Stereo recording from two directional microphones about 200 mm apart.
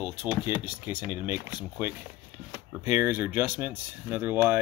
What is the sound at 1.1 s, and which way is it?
Speech, 10° right (ahead or behind).